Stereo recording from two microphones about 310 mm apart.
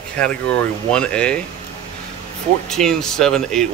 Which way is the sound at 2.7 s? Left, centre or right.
Centre.